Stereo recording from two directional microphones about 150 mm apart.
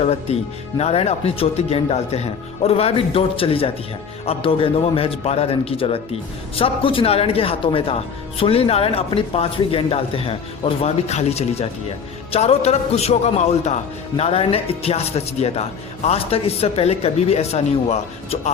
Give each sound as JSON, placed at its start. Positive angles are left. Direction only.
{"t": 0.0, "sound": "speech", "side_deg": 45}